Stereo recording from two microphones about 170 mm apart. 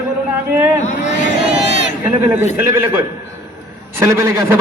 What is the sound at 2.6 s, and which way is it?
A man's voice, 15° right (ahead or behind).